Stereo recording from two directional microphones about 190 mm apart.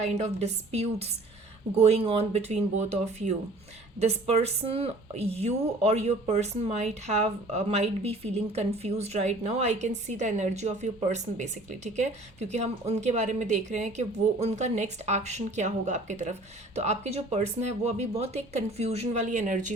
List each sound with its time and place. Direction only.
0.0 s a woman's voice: 35° right (ahead or behind)